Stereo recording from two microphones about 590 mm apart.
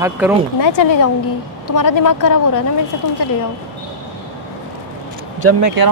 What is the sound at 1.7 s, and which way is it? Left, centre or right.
Speech, left.